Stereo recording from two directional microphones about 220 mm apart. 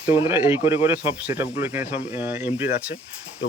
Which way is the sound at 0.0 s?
10° right (ahead or behind).